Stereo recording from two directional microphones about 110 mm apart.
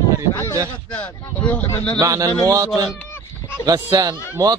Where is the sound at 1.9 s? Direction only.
30° right (ahead or behind).